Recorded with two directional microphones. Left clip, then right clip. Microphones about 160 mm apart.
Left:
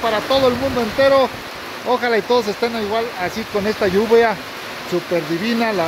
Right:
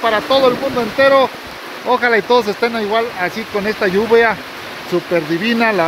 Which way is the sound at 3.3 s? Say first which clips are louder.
Right 1 dB; 20° left (ahead or behind).